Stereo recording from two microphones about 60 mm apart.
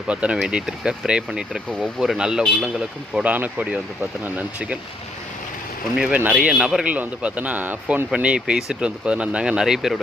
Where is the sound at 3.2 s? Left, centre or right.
Right.